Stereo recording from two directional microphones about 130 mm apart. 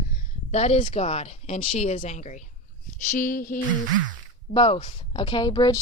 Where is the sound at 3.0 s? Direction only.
80° left.